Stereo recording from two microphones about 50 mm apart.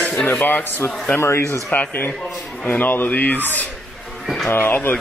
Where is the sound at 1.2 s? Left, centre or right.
Left.